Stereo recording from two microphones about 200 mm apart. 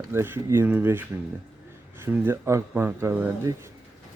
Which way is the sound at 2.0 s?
10° right (ahead or behind).